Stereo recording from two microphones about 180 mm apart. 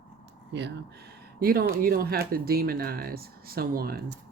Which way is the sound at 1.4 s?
55° right (ahead or behind).